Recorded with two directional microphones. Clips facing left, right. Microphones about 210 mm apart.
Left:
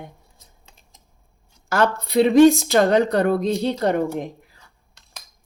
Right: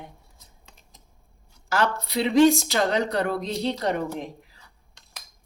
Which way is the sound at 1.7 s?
50° left (ahead or behind).